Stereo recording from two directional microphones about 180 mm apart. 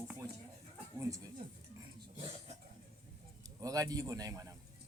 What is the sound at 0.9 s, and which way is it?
Speech, 20° right (ahead or behind).